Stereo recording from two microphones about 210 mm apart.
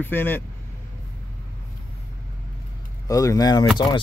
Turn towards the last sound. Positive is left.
turn(degrees=20)  # may be behind; listen again after turning